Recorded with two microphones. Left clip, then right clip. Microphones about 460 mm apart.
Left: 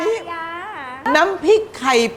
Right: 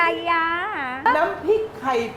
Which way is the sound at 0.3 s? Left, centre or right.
Right.